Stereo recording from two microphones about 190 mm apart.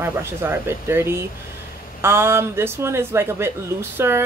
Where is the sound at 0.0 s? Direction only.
10° right (ahead or behind).